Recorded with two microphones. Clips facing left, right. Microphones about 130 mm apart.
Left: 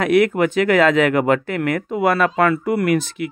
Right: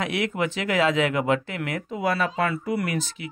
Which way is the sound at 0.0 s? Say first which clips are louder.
Left 10 dB; 55° left (ahead or behind).